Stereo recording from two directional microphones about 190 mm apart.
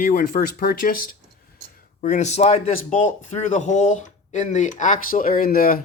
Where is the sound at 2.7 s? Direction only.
45° left (ahead or behind).